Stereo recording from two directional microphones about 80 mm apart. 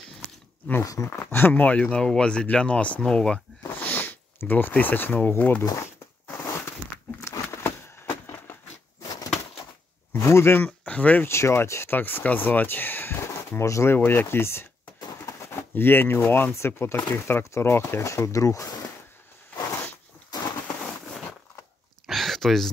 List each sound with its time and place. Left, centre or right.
0.8 s speech: left
1.2 s speech: left; by 3.3 s centre
3.6 s speech: left
6.3 s crushing: left
7.2 s a sound: left
9.0 s a sound: left
10.1 s speech: left
10.9 s speech: centre
11.2 s speech: left
15.0 s a sound: left
15.7 s speech: left
20.8 s a sound: centre